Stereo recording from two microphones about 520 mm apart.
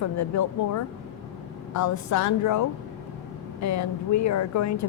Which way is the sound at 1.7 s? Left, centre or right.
Left.